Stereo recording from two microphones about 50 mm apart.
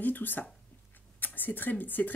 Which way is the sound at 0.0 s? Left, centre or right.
Left.